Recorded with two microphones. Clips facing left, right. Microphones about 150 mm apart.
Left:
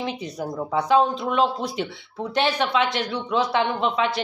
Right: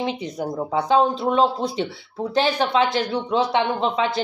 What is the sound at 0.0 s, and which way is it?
A woman's voice, 25° right (ahead or behind).